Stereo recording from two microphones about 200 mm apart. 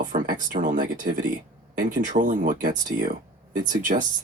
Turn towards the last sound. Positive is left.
turn(degrees=-40)  # may be behind; listen again after turning